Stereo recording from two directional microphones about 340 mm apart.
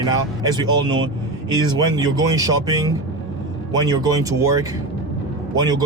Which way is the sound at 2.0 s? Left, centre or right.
Centre.